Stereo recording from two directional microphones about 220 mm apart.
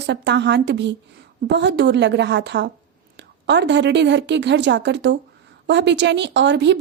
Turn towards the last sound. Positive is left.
turn(degrees=-55)  # may be behind; listen again after turning